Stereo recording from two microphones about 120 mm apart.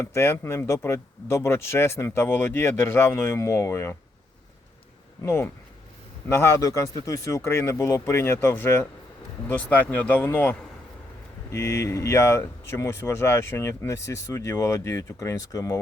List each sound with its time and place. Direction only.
0.0 s speech: 20° left (ahead or behind)
5.2 s speech: 20° left (ahead or behind)